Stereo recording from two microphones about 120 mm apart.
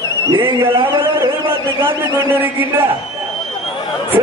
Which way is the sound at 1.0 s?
20° right (ahead or behind).